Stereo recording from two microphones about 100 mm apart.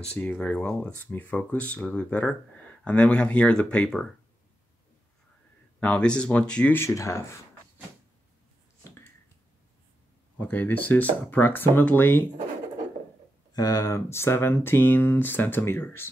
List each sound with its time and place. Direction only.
0.0 s speech: 10° left (ahead or behind)
5.8 s speech: 10° left (ahead or behind)
6.8 s speech: 30° left (ahead or behind)
10.4 s speech: 20° left (ahead or behind)
13.5 s speech: 40° left (ahead or behind); by 16.1 s 25° left (ahead or behind)